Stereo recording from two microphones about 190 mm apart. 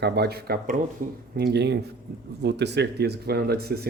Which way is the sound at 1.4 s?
60° right (ahead or behind).